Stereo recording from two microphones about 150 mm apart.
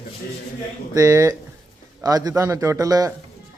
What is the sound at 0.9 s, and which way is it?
Speech, 20° right (ahead or behind).